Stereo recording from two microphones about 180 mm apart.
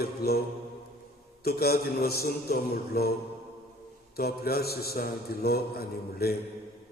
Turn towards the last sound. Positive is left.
turn(degrees=55)  # may be behind; listen again after turning